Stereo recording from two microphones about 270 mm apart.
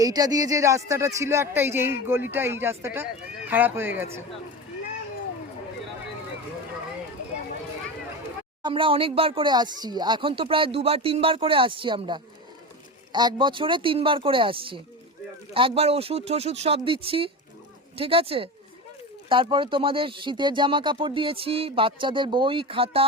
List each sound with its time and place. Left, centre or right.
0.0 s speech: centre
8.6 s speech: centre